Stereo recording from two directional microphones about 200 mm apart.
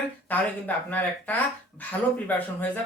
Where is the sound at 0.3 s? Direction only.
10° left (ahead or behind).